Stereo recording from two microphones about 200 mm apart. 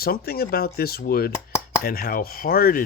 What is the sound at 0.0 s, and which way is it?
Speech, 50° left (ahead or behind).